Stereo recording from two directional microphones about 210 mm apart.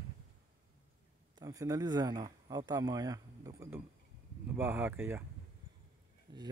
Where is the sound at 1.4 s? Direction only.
15° right (ahead or behind).